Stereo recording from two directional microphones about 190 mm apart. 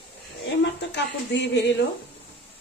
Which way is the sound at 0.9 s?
65° left (ahead or behind).